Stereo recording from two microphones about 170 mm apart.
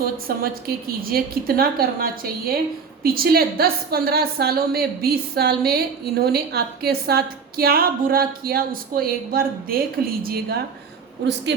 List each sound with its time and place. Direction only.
0.0 s a woman's voice: 60° right (ahead or behind)